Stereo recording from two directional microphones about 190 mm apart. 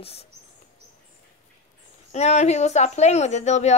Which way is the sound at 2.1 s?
35° left (ahead or behind).